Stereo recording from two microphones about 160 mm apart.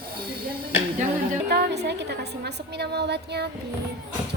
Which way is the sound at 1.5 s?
90° right.